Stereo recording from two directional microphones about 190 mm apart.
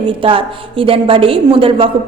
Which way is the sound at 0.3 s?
30° right (ahead or behind).